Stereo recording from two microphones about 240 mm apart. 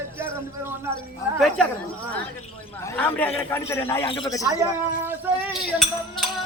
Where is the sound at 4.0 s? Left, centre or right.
Left.